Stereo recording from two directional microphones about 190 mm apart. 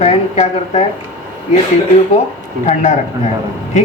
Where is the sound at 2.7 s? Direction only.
40° left (ahead or behind).